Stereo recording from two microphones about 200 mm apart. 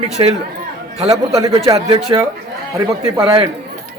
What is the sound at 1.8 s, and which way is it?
Speech, 25° right (ahead or behind).